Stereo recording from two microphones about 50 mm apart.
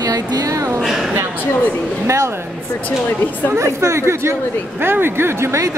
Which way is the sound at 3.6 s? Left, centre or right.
Right.